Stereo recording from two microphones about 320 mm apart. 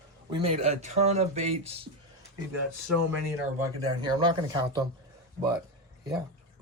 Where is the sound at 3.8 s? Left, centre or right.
Centre.